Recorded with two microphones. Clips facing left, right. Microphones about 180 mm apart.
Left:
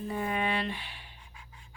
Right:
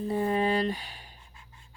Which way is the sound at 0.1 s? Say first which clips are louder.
Right 5 dB; 35° right (ahead or behind).